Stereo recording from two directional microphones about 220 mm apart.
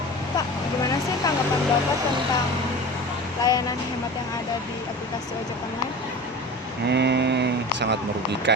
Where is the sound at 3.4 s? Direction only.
15° left (ahead or behind).